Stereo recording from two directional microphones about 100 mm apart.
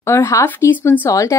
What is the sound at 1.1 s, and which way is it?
Speech, 30° left (ahead or behind).